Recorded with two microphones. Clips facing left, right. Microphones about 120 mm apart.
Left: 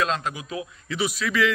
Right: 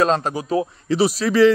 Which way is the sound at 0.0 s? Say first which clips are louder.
Right 7 dB; 40° right (ahead or behind).